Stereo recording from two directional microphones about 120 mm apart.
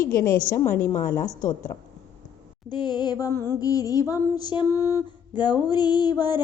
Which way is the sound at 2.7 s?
40° left (ahead or behind).